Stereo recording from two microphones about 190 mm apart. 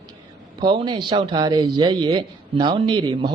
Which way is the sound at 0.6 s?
25° right (ahead or behind).